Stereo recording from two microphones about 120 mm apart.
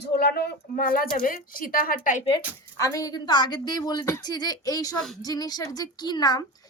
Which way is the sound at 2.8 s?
30° left (ahead or behind).